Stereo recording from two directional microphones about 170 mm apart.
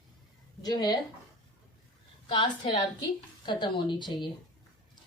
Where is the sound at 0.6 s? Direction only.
25° left (ahead or behind).